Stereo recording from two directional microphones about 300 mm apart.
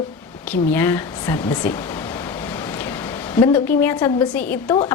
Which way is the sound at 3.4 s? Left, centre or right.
Centre.